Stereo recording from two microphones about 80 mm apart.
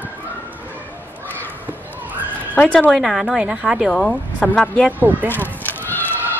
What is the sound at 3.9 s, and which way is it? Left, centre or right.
Speech, centre.